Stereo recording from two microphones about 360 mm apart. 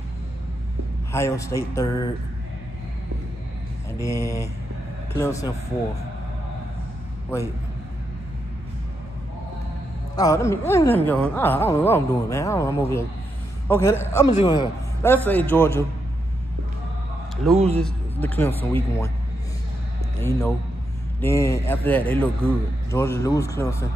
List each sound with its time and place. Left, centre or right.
1.1 s speech: centre
4.0 s speech: centre
10.1 s speech: centre
17.6 s speech: centre
18.2 s speech: centre
20.2 s speech: centre